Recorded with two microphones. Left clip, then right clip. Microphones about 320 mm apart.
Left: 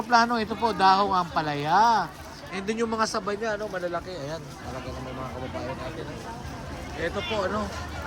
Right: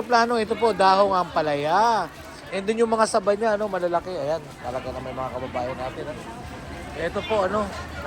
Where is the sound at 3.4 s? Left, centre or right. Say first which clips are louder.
Right 6 dB; right.